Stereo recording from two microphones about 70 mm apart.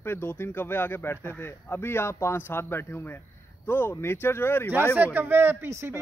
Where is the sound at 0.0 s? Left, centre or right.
Left.